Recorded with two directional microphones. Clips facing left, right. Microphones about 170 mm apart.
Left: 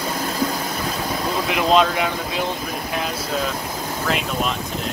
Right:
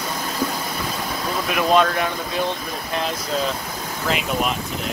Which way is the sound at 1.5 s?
20° left (ahead or behind).